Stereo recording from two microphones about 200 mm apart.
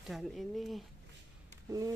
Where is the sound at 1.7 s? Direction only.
15° right (ahead or behind).